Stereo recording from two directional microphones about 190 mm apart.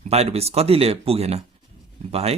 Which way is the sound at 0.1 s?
35° right (ahead or behind).